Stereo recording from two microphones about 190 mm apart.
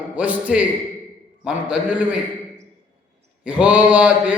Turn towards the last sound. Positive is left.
turn(degrees=-5)  # may be behind; listen again after turning